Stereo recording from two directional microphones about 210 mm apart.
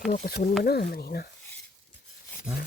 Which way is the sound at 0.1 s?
40° left (ahead or behind).